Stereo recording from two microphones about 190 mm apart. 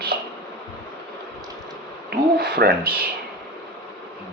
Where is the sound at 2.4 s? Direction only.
55° right (ahead or behind).